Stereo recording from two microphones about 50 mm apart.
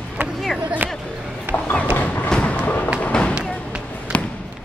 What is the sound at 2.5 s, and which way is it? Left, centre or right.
Music, left.